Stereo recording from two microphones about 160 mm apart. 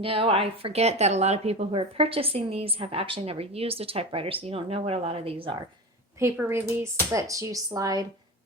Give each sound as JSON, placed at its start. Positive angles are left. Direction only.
{"t": 0.0, "sound": "speech", "side_deg": -35}
{"t": 6.1, "sound": "speech", "side_deg": -15}